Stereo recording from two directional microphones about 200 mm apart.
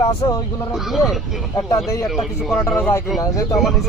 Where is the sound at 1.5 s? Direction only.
15° left (ahead or behind).